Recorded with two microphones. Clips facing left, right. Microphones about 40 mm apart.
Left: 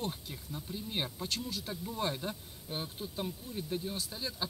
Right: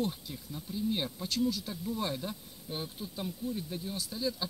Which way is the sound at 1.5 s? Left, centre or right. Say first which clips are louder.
Right 5 dB; left.